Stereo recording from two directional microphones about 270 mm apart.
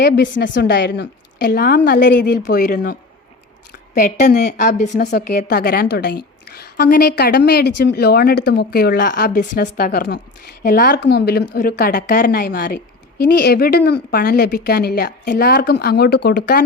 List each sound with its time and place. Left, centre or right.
0.0 s a woman's voice: left